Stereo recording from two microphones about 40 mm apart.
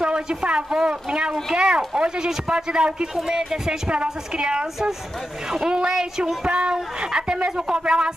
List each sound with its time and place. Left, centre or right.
0.0 s a woman's voice: right
3.9 s a woman's voice: right